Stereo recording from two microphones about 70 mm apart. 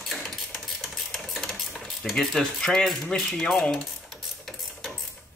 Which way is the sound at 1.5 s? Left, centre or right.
Centre.